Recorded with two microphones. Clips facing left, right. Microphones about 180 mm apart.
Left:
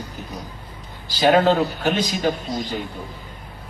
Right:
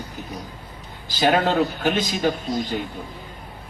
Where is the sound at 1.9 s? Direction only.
50° right (ahead or behind).